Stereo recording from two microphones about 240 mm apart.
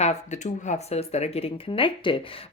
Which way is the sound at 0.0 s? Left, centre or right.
Left.